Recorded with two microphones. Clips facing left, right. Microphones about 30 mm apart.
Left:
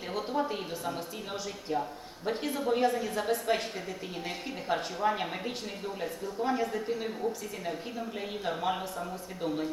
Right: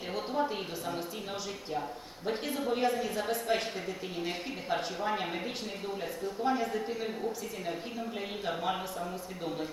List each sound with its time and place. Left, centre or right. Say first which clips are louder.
0.2 s a sound: left 1 dB; centre
2.2 s a woman's voice: left 2 dB; centre
4.7 s a woman's voice: left 3 dB; centre
8.4 s a woman's voice: left 2 dB; centre